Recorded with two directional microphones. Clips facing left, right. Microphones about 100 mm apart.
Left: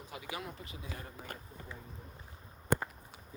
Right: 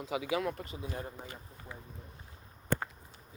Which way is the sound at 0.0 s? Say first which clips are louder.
Right 10 dB; 90° right.